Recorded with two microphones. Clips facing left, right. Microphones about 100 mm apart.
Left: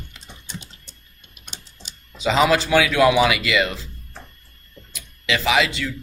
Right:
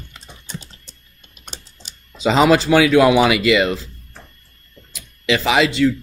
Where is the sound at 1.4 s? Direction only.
35° right (ahead or behind).